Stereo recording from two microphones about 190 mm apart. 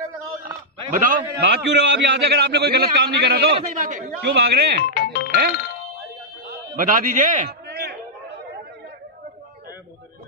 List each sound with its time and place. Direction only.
0.9 s a man's voice: 45° right (ahead or behind)
4.2 s a man's voice: 60° right (ahead or behind)
4.8 s speech: 55° left (ahead or behind)
6.8 s a man's voice: 45° right (ahead or behind)
7.6 s a sound: 55° right (ahead or behind)